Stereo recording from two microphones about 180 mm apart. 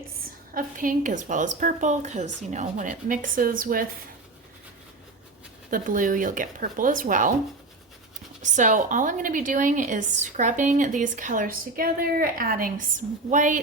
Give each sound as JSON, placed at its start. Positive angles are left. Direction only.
{"t": 0.5, "sound": "a woman's voice", "side_deg": -50}
{"t": 5.7, "sound": "a woman's voice", "side_deg": -50}
{"t": 8.4, "sound": "a woman's voice", "side_deg": -45}